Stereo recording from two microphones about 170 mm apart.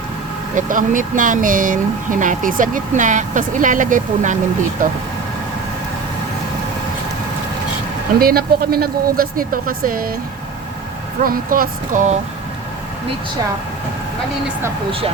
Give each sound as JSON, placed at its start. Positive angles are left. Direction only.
{"t": 0.5, "sound": "speech", "side_deg": -50}
{"t": 8.2, "sound": "speech", "side_deg": -60}
{"t": 11.2, "sound": "speech", "side_deg": -55}